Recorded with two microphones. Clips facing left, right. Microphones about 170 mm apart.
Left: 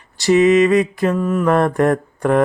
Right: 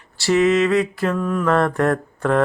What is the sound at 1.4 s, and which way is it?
Speech, 15° left (ahead or behind).